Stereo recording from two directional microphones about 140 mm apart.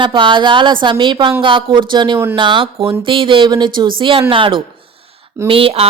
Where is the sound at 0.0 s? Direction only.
35° right (ahead or behind).